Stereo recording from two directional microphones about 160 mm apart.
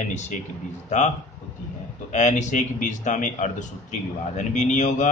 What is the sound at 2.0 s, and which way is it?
Speech, 45° left (ahead or behind).